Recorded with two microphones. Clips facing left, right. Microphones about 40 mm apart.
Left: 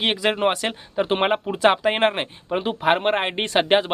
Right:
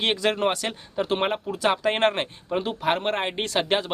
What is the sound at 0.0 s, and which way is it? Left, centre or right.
Speech, centre.